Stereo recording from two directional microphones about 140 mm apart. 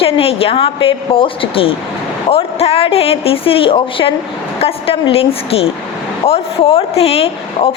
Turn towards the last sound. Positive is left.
turn(degrees=45)  # may be behind; listen again after turning